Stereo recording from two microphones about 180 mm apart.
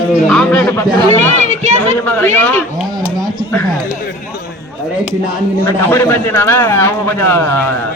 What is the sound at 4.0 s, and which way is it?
Speech, 60° left (ahead or behind).